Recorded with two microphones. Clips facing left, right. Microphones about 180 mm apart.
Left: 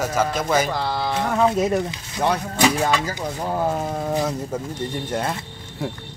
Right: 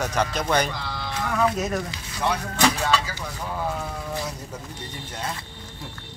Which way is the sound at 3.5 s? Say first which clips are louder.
Left 6 dB; 45° left (ahead or behind).